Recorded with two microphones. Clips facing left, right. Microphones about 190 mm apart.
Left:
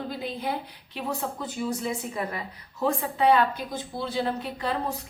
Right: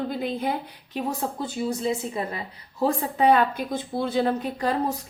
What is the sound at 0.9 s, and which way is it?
A woman's voice, 35° right (ahead or behind).